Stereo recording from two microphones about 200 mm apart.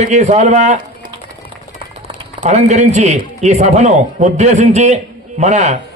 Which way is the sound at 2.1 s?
25° right (ahead or behind).